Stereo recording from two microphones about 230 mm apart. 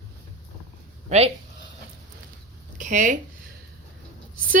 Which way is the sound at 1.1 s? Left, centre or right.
Right.